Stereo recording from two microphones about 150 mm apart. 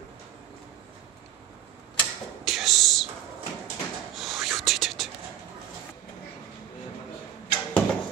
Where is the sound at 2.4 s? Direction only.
Centre (ahead or behind).